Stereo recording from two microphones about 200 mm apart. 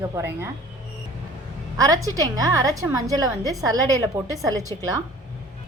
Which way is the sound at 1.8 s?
15° right (ahead or behind).